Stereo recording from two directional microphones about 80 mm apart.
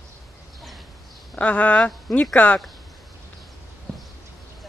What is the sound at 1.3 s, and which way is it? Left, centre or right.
Speech, left.